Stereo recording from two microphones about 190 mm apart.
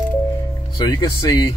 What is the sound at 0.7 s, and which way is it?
Speech, 20° left (ahead or behind).